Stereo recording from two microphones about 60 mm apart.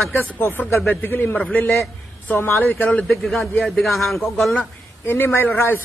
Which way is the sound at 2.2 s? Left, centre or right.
Left.